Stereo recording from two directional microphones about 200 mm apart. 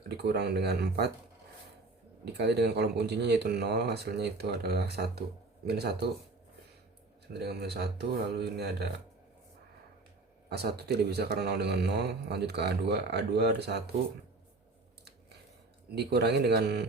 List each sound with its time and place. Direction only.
0.2 s a man's voice: 55° right (ahead or behind)
2.2 s a man's voice: 55° right (ahead or behind)
7.3 s a man's voice: 55° right (ahead or behind)
10.5 s a man's voice: 55° right (ahead or behind)
15.9 s a man's voice: 55° right (ahead or behind)